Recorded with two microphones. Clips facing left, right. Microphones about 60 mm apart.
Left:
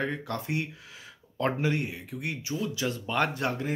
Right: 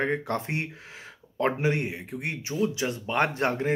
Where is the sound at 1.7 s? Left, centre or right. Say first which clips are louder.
Right 2 dB; right.